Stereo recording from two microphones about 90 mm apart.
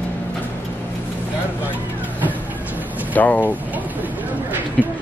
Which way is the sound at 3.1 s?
20° left (ahead or behind).